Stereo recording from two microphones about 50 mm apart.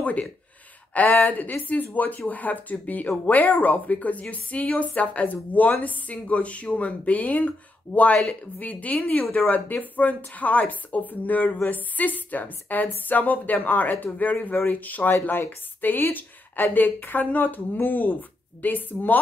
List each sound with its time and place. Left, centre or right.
0.0 s speech: left
8.9 s speech: centre
9.5 s speech: left